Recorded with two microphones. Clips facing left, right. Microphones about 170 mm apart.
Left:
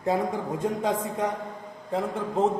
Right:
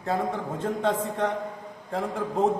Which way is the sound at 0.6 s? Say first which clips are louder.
Right 1 dB; 10° left (ahead or behind).